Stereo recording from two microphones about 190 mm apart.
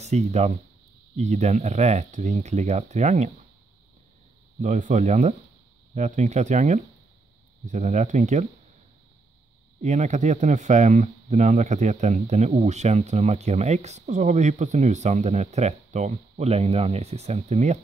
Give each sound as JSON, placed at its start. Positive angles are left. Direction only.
{"t": 0.0, "sound": "speech", "side_deg": -35}
{"t": 4.6, "sound": "speech", "side_deg": -40}
{"t": 9.8, "sound": "speech", "side_deg": -40}